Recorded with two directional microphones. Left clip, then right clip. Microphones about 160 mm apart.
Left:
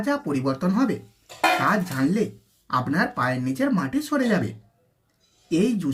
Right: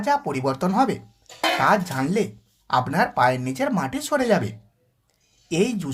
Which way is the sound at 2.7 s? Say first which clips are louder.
Right 3 dB; 40° right (ahead or behind).